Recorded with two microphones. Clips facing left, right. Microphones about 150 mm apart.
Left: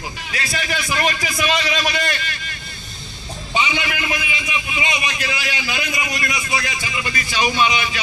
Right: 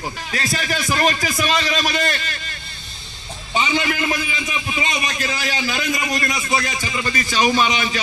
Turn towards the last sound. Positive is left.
turn(degrees=-40)  # may be behind; listen again after turning